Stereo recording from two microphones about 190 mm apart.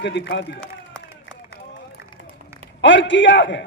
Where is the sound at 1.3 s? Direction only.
75° left (ahead or behind).